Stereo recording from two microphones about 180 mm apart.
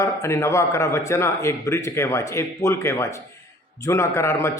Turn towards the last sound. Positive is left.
turn(degrees=15)  # may be behind; listen again after turning